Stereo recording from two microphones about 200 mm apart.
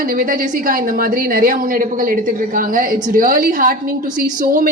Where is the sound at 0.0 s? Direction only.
45° right (ahead or behind).